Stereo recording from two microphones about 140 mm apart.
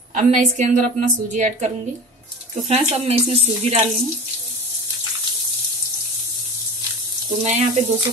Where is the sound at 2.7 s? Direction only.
50° right (ahead or behind).